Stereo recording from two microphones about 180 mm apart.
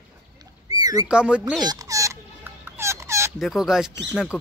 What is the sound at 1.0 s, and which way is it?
Speech, 5° right (ahead or behind).